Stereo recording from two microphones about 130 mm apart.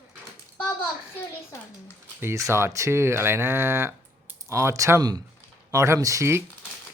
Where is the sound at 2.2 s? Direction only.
20° right (ahead or behind).